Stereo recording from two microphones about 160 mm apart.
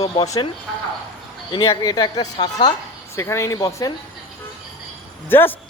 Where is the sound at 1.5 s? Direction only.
25° left (ahead or behind).